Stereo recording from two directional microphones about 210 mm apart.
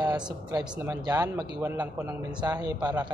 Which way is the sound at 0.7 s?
10° right (ahead or behind).